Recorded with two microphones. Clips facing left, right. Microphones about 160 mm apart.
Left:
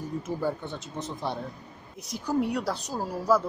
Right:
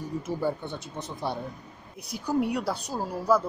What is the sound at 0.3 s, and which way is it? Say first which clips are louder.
Speech: right 1 dB; centre (ahead or behind).